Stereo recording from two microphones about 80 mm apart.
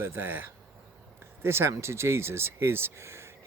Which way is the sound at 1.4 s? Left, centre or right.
Right.